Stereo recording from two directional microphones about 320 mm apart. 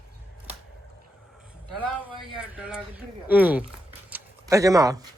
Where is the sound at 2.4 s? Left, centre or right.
Centre.